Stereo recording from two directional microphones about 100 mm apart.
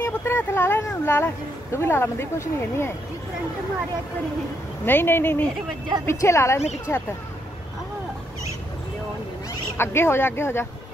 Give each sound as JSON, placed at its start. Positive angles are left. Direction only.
{"t": 0.0, "sound": "speech", "side_deg": 25}
{"t": 4.8, "sound": "speech", "side_deg": 20}
{"t": 9.8, "sound": "speech", "side_deg": 25}